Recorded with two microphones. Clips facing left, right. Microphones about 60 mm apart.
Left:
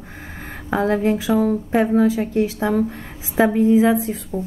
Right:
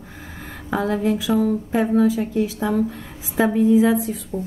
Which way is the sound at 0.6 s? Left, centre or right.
Left.